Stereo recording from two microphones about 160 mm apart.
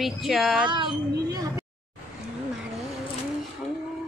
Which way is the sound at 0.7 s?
30° right (ahead or behind).